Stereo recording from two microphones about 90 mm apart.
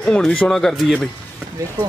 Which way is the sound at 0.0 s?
10° left (ahead or behind).